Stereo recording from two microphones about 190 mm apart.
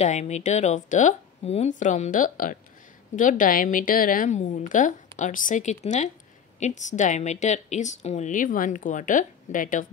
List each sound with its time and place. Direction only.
0.0 s a woman's voice: 35° left (ahead or behind)